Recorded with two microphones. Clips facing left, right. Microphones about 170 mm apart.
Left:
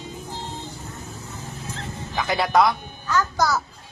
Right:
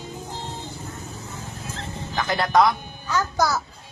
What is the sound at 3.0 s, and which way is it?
Speech, 10° right (ahead or behind).